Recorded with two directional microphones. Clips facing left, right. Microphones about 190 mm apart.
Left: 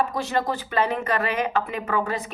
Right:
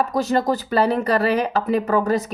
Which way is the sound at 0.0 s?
40° right (ahead or behind).